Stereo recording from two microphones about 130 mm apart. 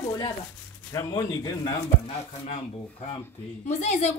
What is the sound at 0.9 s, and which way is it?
Speech, 30° left (ahead or behind).